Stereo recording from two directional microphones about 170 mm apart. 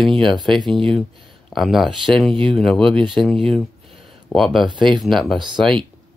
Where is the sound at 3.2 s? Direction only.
Centre (ahead or behind).